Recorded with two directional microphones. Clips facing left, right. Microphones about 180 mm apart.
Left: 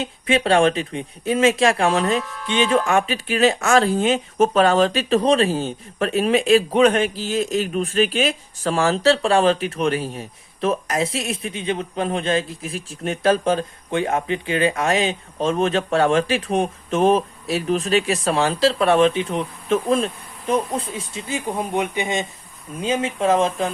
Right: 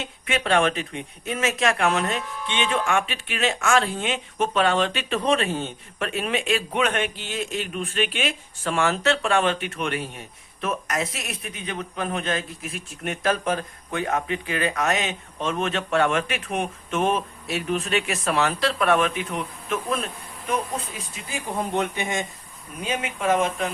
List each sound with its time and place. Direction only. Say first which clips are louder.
0.0 s speech: left 7 dB; 30° left (ahead or behind)
21.1 s speech: left 5 dB; 20° left (ahead or behind)